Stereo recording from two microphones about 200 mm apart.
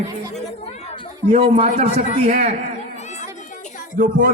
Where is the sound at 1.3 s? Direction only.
30° right (ahead or behind).